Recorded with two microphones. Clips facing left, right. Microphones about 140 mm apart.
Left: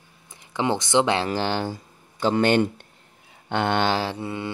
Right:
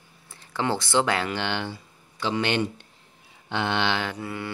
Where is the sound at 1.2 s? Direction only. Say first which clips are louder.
Left 4 dB; 35° left (ahead or behind).